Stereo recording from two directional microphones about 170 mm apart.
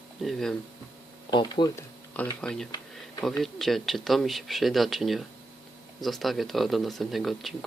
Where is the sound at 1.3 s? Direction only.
25° left (ahead or behind).